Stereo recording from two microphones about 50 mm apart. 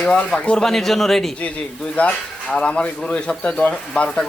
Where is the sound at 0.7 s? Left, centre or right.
Centre.